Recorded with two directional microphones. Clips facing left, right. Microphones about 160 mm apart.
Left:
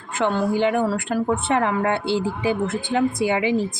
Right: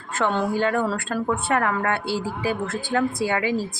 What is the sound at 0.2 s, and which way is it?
A woman's voice, 15° left (ahead or behind).